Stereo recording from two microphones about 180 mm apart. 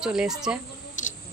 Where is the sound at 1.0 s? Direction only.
45° left (ahead or behind).